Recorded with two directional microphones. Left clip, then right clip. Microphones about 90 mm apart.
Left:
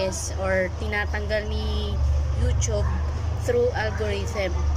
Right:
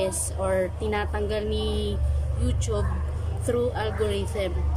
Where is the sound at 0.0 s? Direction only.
25° right (ahead or behind).